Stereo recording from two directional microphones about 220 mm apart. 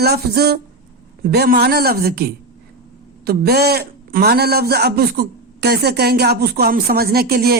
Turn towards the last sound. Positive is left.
turn(degrees=-45)  # may be behind; listen again after turning